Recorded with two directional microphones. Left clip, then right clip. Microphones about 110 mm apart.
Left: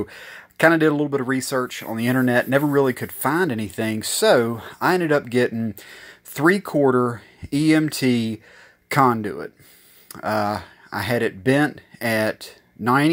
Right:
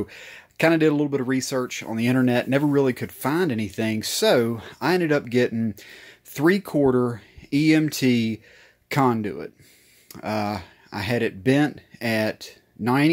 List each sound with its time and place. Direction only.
0.0 s speech: 15° right (ahead or behind)